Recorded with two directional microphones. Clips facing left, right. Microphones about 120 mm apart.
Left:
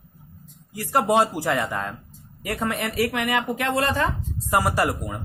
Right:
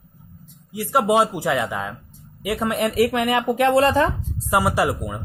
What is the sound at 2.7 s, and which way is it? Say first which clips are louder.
Speech: right 9 dB; 15° right (ahead or behind).